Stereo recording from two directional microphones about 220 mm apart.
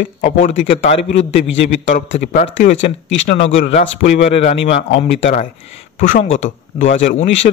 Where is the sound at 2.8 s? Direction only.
55° left (ahead or behind).